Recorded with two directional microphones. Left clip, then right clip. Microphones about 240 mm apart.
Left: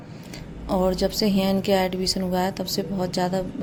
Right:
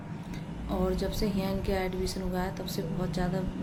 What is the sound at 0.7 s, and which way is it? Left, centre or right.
A woman's voice, left.